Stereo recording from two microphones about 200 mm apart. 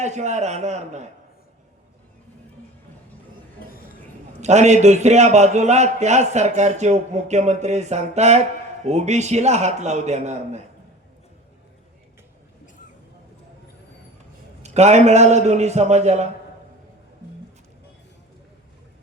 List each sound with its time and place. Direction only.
0.0 s a man's voice: 35° right (ahead or behind)
3.6 s a sound: 45° left (ahead or behind)
4.4 s a man's voice: 35° right (ahead or behind)
14.6 s a man's voice: 35° right (ahead or behind)